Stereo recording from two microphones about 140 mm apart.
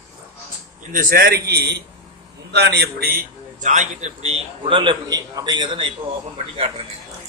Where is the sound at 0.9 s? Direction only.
85° right.